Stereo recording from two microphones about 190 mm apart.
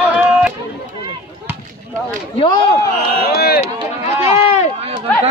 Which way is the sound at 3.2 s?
55° left (ahead or behind).